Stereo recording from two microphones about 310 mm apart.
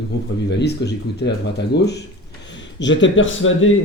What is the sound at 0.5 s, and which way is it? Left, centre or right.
Speech, left.